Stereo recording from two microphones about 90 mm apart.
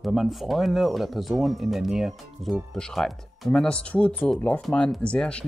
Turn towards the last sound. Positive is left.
turn(degrees=10)  # may be behind; listen again after turning